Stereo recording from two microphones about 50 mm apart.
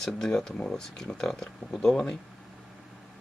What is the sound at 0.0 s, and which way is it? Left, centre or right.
Speech, centre.